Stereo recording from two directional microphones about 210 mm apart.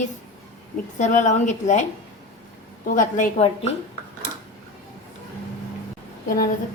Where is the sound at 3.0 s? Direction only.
35° left (ahead or behind).